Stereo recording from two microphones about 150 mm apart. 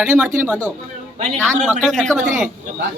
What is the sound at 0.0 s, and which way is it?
Speech, 10° right (ahead or behind).